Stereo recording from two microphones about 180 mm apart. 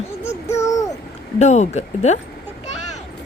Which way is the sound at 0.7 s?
20° left (ahead or behind).